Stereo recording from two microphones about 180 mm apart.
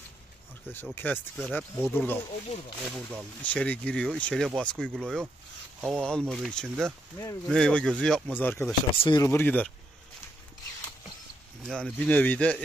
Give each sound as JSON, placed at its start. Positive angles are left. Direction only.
{"t": 0.9, "sound": "speech", "side_deg": 10}
{"t": 2.8, "sound": "speech", "side_deg": 0}
{"t": 8.9, "sound": "speech", "side_deg": 30}
{"t": 9.2, "sound": "speech", "side_deg": 10}
{"t": 11.6, "sound": "speech", "side_deg": 5}